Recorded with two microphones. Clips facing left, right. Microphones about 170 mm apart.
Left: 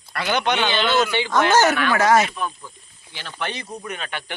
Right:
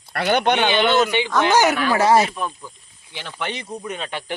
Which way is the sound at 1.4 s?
15° right (ahead or behind).